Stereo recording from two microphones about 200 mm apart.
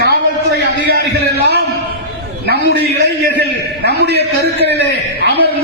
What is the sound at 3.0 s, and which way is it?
A man's voice, 55° right (ahead or behind).